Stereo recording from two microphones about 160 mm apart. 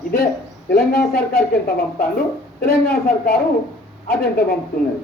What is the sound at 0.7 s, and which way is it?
A man's voice, 70° left (ahead or behind).